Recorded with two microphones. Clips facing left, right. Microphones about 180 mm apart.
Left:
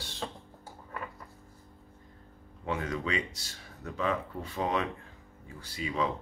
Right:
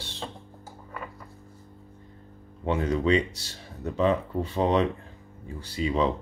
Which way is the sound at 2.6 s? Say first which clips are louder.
Right 8 dB; 30° right (ahead or behind).